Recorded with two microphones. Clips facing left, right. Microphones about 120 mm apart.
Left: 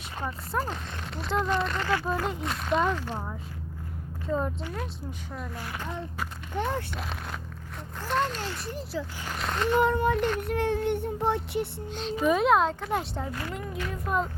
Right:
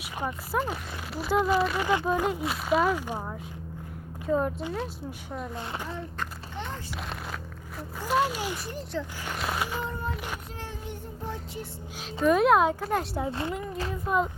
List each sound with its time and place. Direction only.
0.2 s speech: 10° right (ahead or behind)
1.9 s speech: 15° right (ahead or behind)
6.6 s speech: 55° left (ahead or behind)
8.0 s speech: 10° right (ahead or behind)
8.7 s speech: centre (ahead or behind)
9.7 s speech: 70° left (ahead or behind)
10.2 s speech: 10° right (ahead or behind)
10.5 s a sound: 60° left (ahead or behind)
12.2 s speech: centre (ahead or behind)